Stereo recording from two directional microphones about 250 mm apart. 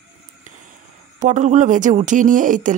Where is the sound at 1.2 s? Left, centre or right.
Right.